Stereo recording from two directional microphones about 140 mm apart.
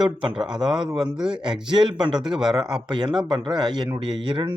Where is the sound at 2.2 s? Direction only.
5° right (ahead or behind).